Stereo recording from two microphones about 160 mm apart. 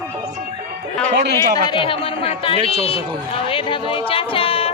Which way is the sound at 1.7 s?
35° left (ahead or behind).